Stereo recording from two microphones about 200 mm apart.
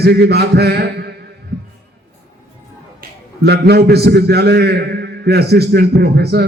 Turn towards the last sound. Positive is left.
turn(degrees=-55)  # may be behind; listen again after turning